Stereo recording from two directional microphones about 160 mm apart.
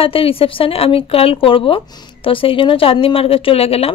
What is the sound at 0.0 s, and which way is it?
Speech, 35° left (ahead or behind).